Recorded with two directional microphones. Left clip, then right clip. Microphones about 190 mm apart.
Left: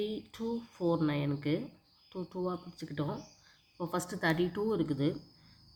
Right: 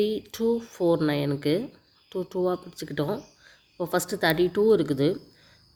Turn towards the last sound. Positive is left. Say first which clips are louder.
# right 11 dB
turn(degrees=-50)  # may be behind; listen again after turning